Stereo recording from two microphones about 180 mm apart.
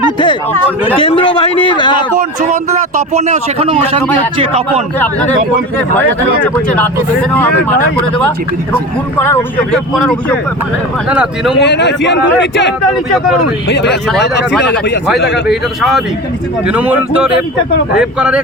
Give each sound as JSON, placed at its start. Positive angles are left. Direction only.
{"t": 0.9, "sound": "a man's voice", "side_deg": 30}
{"t": 3.1, "sound": "a man's voice", "side_deg": -40}
{"t": 6.0, "sound": "speech", "side_deg": 10}
{"t": 9.1, "sound": "speech", "side_deg": 10}
{"t": 11.6, "sound": "speech", "side_deg": 70}
{"t": 13.1, "sound": "speech", "side_deg": 0}
{"t": 13.7, "sound": "speech", "side_deg": 75}
{"t": 15.4, "sound": "speech", "side_deg": 0}